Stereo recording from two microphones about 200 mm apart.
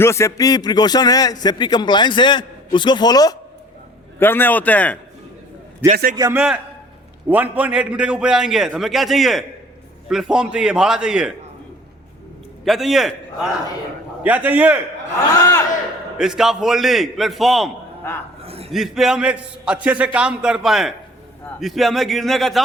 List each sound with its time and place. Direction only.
0.0 s a man's voice: 15° left (ahead or behind)
5.8 s a man's voice: 15° right (ahead or behind)
12.6 s a man's voice: centre (ahead or behind)
16.1 s a man's voice: 5° right (ahead or behind)
18.4 s a sound: 30° right (ahead or behind)
18.7 s a man's voice: centre (ahead or behind)